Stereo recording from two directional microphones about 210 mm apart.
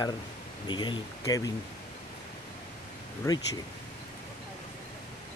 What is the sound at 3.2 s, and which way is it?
Speech, 15° left (ahead or behind).